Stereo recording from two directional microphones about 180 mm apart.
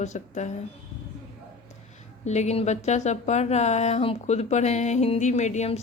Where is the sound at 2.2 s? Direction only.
40° left (ahead or behind).